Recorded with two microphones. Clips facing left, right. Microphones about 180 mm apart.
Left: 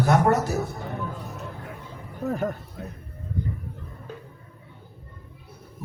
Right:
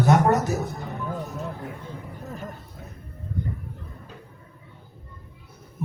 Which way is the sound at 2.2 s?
65° left (ahead or behind).